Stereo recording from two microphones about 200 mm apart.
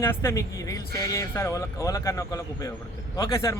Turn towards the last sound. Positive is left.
turn(degrees=15)  # may be behind; listen again after turning